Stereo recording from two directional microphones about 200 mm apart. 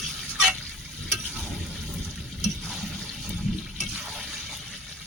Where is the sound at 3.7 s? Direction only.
Centre (ahead or behind).